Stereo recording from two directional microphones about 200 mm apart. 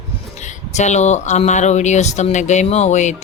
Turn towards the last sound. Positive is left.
turn(degrees=35)  # may be behind; listen again after turning